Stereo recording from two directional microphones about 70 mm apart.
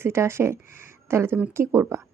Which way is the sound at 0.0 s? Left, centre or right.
Right.